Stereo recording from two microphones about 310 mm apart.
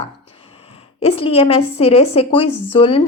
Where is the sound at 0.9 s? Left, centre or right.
Centre.